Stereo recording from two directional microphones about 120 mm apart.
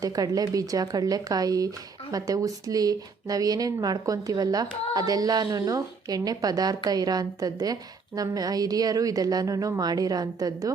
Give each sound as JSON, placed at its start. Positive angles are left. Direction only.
{"t": 0.0, "sound": "speech", "side_deg": -30}